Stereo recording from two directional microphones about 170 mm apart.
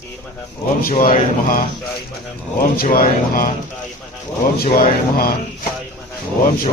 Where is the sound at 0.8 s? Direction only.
55° left (ahead or behind).